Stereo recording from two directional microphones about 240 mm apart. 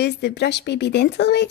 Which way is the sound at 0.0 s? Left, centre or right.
Left.